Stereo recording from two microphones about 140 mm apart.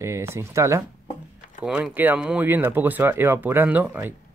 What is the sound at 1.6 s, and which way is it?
Speech, 10° right (ahead or behind).